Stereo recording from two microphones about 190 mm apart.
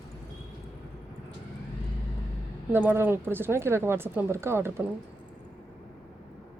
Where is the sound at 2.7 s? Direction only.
10° right (ahead or behind).